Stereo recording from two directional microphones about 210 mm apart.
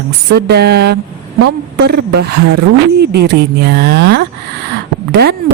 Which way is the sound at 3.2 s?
50° right (ahead or behind).